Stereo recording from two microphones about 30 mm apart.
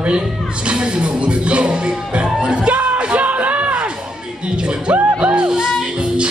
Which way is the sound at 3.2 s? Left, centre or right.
Right.